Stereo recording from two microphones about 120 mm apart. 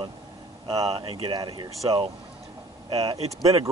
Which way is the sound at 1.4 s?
35° right (ahead or behind).